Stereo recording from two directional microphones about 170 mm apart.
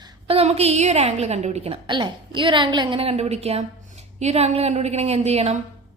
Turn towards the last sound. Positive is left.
turn(degrees=-35)  # may be behind; listen again after turning